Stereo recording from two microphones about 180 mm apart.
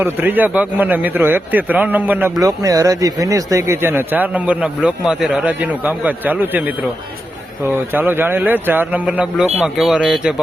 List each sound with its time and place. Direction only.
0.0 s speech: 10° right (ahead or behind)